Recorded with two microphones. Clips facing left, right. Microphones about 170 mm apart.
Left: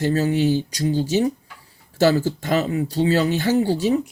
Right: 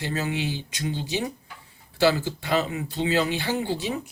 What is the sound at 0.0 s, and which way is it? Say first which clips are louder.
Speech: left 9 dB; 40° left (ahead or behind).